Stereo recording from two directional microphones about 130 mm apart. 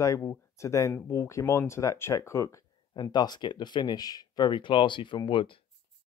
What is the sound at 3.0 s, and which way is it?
Speech, 35° left (ahead or behind).